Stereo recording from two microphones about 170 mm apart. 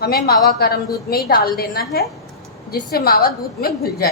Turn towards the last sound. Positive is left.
turn(degrees=65)  # may be behind; listen again after turning